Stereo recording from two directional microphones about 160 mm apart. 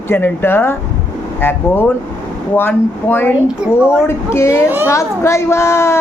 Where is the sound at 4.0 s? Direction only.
15° left (ahead or behind).